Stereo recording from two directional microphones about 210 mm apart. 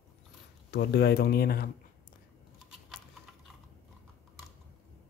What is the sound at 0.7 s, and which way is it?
Speech, 50° left (ahead or behind).